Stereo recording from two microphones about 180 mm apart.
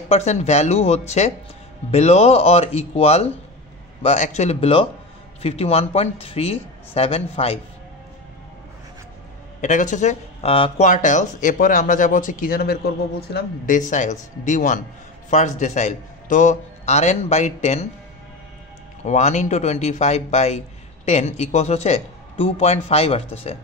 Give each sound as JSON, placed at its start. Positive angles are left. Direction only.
{"t": 0.1, "sound": "speech", "side_deg": 40}
{"t": 9.6, "sound": "speech", "side_deg": 45}
{"t": 10.9, "sound": "speech", "side_deg": 45}
{"t": 13.7, "sound": "speech", "side_deg": 45}
{"t": 19.0, "sound": "speech", "side_deg": 40}